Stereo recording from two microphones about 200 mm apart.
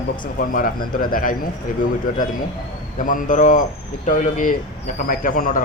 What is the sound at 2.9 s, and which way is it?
A man's voice, 40° left (ahead or behind).